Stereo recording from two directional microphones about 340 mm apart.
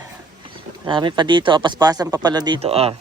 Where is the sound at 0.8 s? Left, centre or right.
Centre.